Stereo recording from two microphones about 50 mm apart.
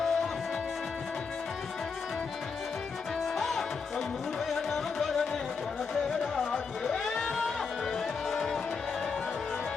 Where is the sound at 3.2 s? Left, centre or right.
Centre.